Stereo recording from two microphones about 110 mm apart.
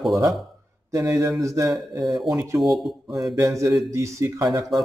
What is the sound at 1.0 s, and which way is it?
Speech, 30° right (ahead or behind).